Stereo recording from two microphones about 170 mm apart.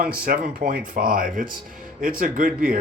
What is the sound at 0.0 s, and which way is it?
Speech, 60° right (ahead or behind).